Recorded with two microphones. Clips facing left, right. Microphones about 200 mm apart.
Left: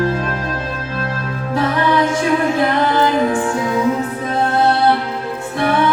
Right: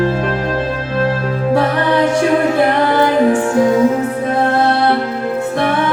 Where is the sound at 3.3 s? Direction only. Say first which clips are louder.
Right 6 dB; 45° right (ahead or behind).